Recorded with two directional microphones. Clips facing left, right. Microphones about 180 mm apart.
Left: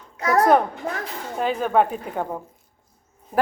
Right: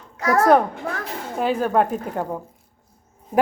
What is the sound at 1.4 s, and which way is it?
Speech, 5° right (ahead or behind).